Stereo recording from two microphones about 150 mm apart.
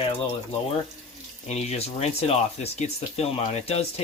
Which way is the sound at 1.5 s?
45° left (ahead or behind).